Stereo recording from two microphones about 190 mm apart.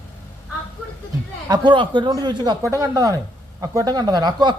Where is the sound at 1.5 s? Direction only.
25° right (ahead or behind).